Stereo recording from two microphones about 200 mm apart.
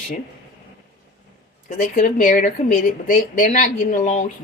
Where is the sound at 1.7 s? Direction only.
40° left (ahead or behind).